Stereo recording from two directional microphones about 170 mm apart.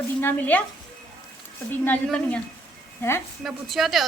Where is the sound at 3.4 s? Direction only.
Centre (ahead or behind).